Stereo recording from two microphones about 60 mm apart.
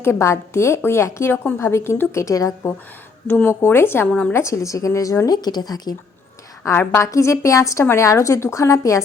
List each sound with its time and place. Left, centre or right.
0.0 s a woman's voice: left
2.3 s a woman's voice: left
3.2 s a woman's voice: left
4.5 s speech: left
6.7 s speech: left